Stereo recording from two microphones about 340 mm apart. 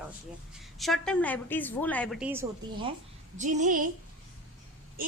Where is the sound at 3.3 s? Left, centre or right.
Right.